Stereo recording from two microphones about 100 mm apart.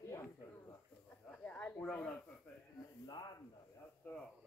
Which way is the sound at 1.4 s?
15° left (ahead or behind).